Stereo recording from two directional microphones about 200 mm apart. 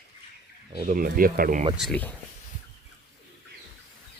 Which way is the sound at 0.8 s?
45° right (ahead or behind).